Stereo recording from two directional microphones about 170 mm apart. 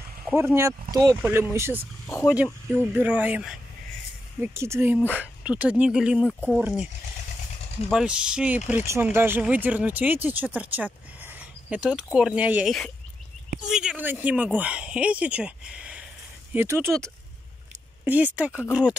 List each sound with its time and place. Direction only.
0.6 s speech: 20° right (ahead or behind)
2.2 s speech: centre (ahead or behind)
2.8 s speech: 10° right (ahead or behind)
7.9 s speech: 5° right (ahead or behind)